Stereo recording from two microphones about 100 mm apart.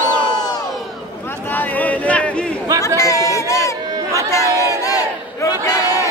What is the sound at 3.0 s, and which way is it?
Chatter, 35° left (ahead or behind).